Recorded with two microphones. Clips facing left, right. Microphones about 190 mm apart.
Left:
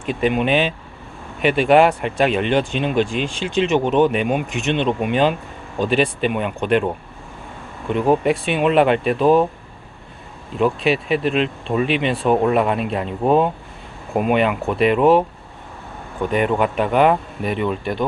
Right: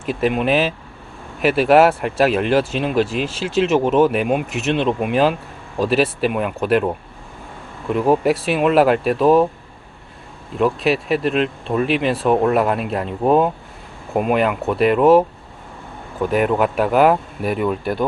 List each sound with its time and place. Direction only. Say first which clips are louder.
0.0 s speech: even; centre (ahead or behind)
10.6 s speech: even; centre (ahead or behind)
16.3 s speech: right 1 dB; 5° right (ahead or behind)